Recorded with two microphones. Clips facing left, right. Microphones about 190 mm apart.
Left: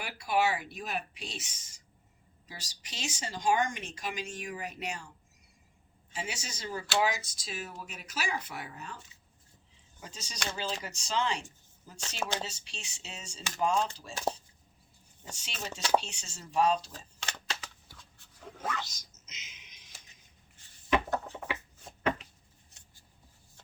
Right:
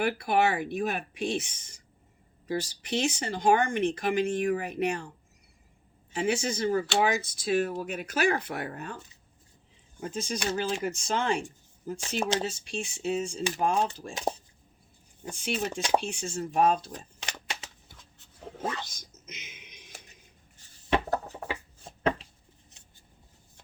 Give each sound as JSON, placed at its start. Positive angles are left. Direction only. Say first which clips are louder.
{"t": 0.0, "sound": "speech", "louder": "right 5 dB", "side_deg": -55}
{"t": 6.1, "sound": "speech", "louder": "right 13 dB", "side_deg": -55}
{"t": 10.0, "sound": "speech", "louder": "right 10 dB", "side_deg": -55}
{"t": 14.1, "sound": "speech", "louder": "right 2 dB", "side_deg": -20}
{"t": 15.2, "sound": "speech", "louder": "right 11 dB", "side_deg": -55}
{"t": 17.2, "sound": "a sound", "louder": "left 3 dB", "side_deg": -15}
{"t": 18.5, "sound": "dog", "louder": "right 3 dB", "side_deg": -30}
{"t": 18.9, "sound": "a sound", "louder": "right 9 dB", "side_deg": -55}
{"t": 20.9, "sound": "a sound", "louder": "right 2 dB", "side_deg": -30}